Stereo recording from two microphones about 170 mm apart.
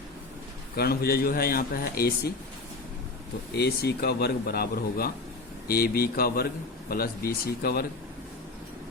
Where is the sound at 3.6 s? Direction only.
70° left (ahead or behind).